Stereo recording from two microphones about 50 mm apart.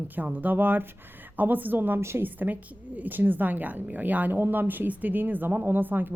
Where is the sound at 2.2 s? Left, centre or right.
Right.